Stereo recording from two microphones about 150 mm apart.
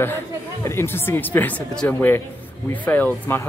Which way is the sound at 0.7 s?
15° left (ahead or behind).